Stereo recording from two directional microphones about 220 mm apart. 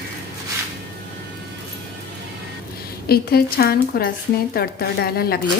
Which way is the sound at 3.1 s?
45° left (ahead or behind).